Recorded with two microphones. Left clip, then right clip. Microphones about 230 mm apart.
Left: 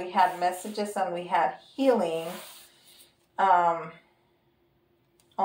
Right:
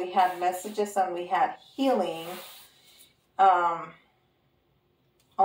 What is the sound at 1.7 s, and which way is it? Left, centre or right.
Speech, left.